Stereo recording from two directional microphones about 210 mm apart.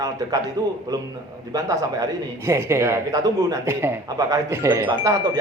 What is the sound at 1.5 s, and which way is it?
A man's voice, 15° right (ahead or behind).